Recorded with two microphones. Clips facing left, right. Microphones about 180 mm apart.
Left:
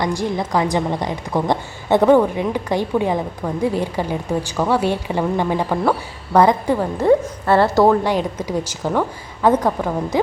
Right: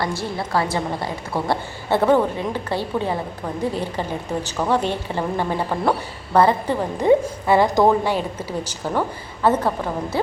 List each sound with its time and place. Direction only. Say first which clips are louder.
0.0 s a woman's voice: left 4 dB; 15° left (ahead or behind)
6.9 s a woman's voice: right 1 dB; 15° right (ahead or behind)
8.1 s a woman's voice: left 4 dB; 15° left (ahead or behind)